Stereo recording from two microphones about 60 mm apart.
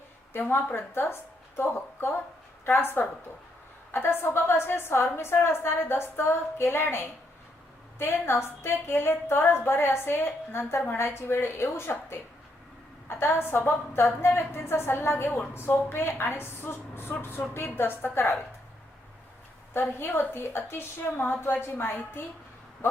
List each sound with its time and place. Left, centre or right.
0.5 s a woman's voice: left
19.7 s a woman's voice: left